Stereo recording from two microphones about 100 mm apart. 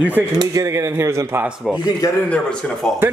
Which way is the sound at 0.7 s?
30° right (ahead or behind).